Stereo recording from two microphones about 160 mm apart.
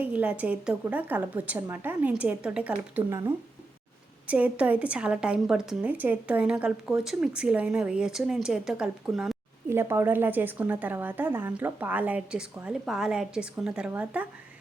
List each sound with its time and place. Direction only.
0.0 s a woman's voice: 10° right (ahead or behind)
9.6 s a woman's voice: 15° right (ahead or behind)